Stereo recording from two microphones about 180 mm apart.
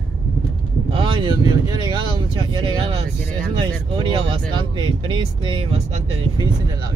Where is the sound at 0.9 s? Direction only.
30° right (ahead or behind).